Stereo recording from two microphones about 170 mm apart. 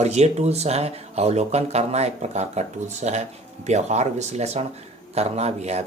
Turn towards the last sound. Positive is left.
turn(degrees=-40)  # may be behind; listen again after turning